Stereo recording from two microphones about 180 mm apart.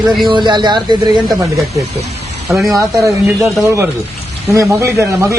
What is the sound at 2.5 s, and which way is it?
Speech, centre (ahead or behind).